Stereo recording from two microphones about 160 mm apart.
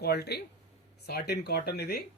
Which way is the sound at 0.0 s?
85° left.